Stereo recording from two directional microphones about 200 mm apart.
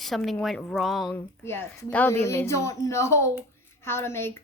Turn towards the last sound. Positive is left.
turn(degrees=10)  # may be behind; listen again after turning